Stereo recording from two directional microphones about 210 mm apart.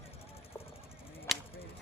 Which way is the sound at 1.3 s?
Centre (ahead or behind).